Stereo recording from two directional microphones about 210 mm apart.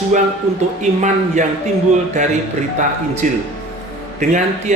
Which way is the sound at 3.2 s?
35° right (ahead or behind).